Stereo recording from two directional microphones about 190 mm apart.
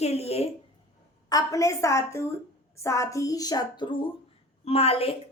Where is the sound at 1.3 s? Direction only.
20° left (ahead or behind).